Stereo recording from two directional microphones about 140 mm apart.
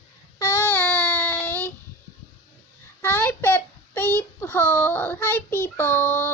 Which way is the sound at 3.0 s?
15° left (ahead or behind).